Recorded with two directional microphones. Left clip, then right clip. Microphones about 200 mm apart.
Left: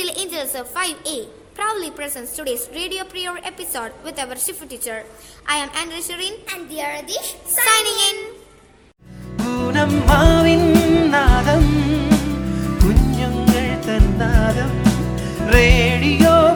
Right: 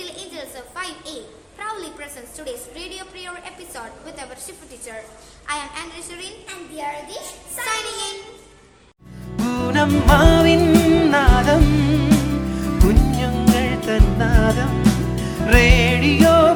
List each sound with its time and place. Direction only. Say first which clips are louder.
0.0 s a sound: left 8 dB; 45° left (ahead or behind)
1.5 s a woman's voice: left 7 dB; 40° left (ahead or behind)
9.3 s music: even; centre (ahead or behind)